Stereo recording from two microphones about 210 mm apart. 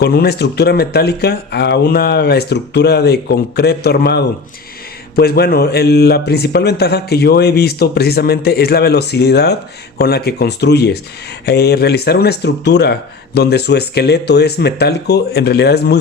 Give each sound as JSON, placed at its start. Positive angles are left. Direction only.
{"t": 0.0, "sound": "speech", "side_deg": 50}